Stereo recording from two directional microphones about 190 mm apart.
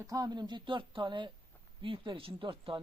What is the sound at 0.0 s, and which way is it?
Speech, 20° right (ahead or behind).